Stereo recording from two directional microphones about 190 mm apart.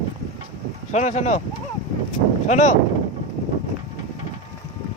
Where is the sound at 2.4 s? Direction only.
40° left (ahead or behind).